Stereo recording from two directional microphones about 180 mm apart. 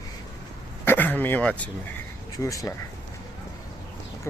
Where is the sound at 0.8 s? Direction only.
10° left (ahead or behind).